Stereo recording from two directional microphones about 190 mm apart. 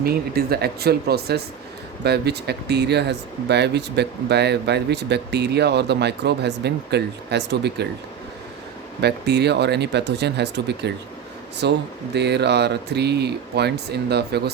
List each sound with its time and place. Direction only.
0.0 s speech: 55° right (ahead or behind)
9.0 s speech: 60° right (ahead or behind)